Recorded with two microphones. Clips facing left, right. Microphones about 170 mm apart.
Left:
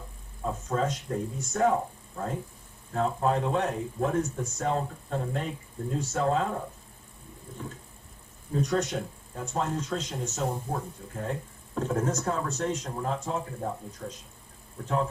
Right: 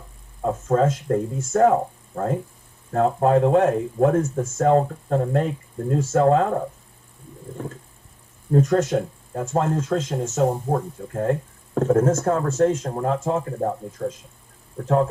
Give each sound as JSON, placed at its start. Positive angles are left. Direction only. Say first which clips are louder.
{"t": 0.4, "sound": "speech", "louder": "right 9 dB", "side_deg": -50}
{"t": 8.5, "sound": "speech", "louder": "right 9 dB", "side_deg": -50}